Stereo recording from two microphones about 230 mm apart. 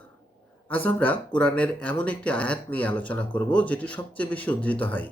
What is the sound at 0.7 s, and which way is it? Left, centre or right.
Speech, centre.